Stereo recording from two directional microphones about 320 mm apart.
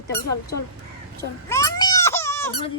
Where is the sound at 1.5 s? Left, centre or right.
Centre.